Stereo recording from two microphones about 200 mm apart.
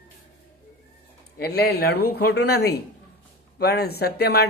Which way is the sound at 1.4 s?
50° left (ahead or behind).